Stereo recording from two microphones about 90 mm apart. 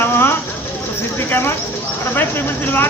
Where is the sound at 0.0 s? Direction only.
25° left (ahead or behind).